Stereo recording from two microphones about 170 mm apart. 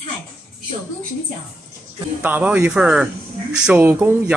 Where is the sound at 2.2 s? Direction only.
10° right (ahead or behind).